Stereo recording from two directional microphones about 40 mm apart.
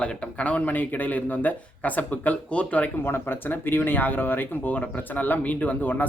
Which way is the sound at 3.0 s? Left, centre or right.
Left.